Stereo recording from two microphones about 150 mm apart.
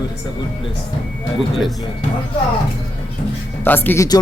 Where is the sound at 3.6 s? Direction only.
15° left (ahead or behind).